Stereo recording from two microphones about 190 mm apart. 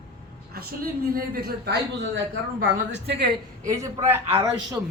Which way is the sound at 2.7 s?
35° right (ahead or behind).